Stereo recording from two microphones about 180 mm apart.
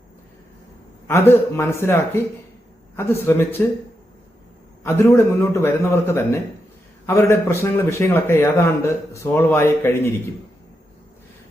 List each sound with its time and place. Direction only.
1.0 s a man's voice: 15° left (ahead or behind)
4.8 s a man's voice: 15° left (ahead or behind)